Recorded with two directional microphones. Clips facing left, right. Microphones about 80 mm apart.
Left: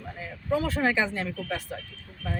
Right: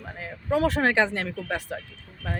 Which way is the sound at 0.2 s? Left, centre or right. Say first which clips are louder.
Right 4 dB; right.